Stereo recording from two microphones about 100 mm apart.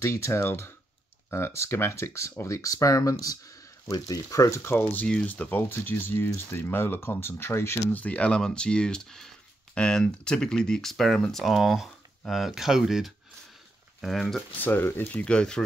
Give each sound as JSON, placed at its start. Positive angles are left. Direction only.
{"t": 0.0, "sound": "speech", "side_deg": 30}
{"t": 4.9, "sound": "speech", "side_deg": 10}
{"t": 8.0, "sound": "speech", "side_deg": 15}
{"t": 14.6, "sound": "speech", "side_deg": 20}